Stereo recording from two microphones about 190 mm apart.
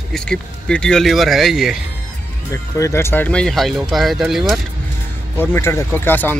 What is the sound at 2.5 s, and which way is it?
Speech, 15° left (ahead or behind).